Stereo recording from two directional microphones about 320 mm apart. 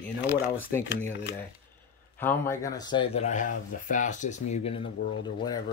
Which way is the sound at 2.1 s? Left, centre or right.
Centre.